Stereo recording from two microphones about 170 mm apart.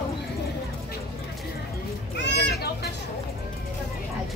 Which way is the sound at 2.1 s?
80° left.